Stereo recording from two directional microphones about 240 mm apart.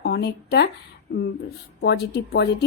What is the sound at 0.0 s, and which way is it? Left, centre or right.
Speech, left.